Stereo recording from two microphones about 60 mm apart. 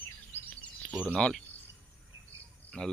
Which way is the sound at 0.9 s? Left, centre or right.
Right.